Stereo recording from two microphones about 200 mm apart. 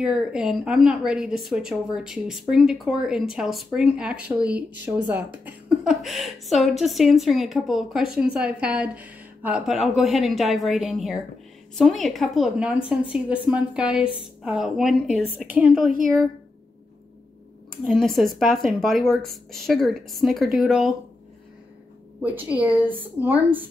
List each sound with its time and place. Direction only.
0.0 s a woman's voice: 5° right (ahead or behind)
17.8 s a woman's voice: centre (ahead or behind)
22.2 s a woman's voice: 10° right (ahead or behind)